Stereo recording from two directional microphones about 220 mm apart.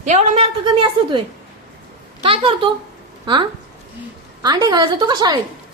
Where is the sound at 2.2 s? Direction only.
25° right (ahead or behind).